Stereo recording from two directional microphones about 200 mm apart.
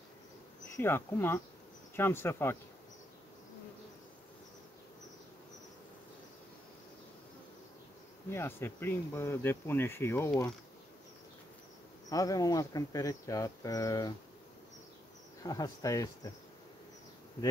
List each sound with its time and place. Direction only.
0.7 s speech: 10° left (ahead or behind)
8.3 s speech: 10° left (ahead or behind)
12.1 s speech: 15° left (ahead or behind)
15.4 s speech: 20° left (ahead or behind)